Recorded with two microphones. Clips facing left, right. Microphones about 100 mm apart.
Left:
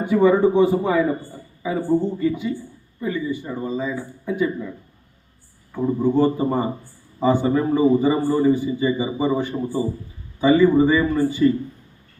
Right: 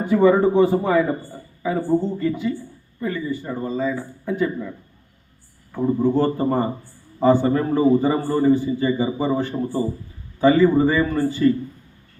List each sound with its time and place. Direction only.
0.0 s a man's voice: 15° left (ahead or behind)
6.0 s a man's voice: 15° left (ahead or behind)